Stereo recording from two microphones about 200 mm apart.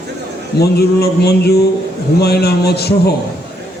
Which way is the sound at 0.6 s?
55° left (ahead or behind).